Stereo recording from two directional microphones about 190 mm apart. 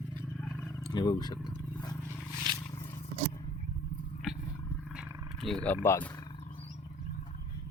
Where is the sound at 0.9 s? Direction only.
20° left (ahead or behind).